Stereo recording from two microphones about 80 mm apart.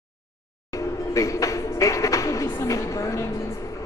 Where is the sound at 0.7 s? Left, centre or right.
Left.